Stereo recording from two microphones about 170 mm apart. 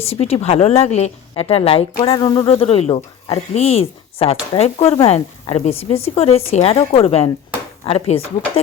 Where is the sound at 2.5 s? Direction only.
35° left (ahead or behind).